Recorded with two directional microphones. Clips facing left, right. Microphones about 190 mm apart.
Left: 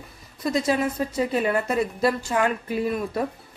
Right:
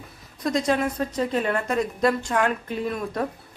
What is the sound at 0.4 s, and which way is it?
A woman's voice, 5° left (ahead or behind).